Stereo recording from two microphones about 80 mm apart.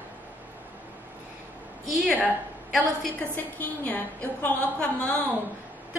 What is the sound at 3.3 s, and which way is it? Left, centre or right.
A woman's voice, left.